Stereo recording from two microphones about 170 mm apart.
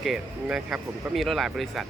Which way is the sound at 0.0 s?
5° right (ahead or behind).